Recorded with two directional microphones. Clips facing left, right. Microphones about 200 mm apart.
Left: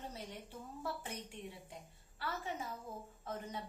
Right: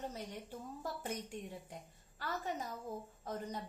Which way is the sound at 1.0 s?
45° right (ahead or behind).